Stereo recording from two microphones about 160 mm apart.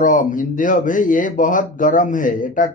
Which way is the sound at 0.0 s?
55° left (ahead or behind).